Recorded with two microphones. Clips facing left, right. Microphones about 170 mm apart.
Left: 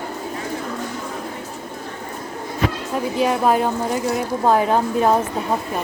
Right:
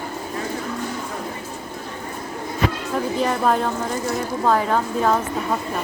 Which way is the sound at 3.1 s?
10° left (ahead or behind).